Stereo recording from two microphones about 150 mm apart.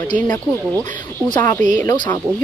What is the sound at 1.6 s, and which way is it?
Speech, 55° right (ahead or behind).